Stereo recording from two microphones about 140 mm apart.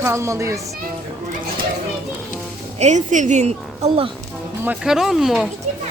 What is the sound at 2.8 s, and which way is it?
A woman's voice, 60° right (ahead or behind).